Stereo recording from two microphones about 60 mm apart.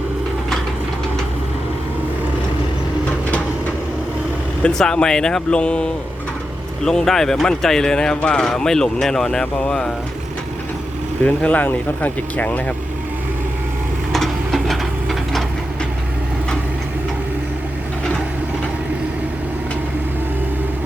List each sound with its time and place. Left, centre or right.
4.6 s speech: centre
11.3 s speech: left
14.1 s a sound: centre